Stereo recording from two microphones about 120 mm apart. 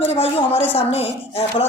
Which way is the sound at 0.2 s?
55° left (ahead or behind).